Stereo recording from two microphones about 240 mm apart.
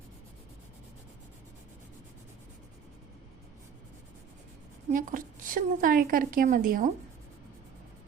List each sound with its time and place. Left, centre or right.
4.9 s a woman's voice: right